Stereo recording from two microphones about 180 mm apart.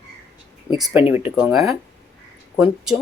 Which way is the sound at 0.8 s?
10° right (ahead or behind).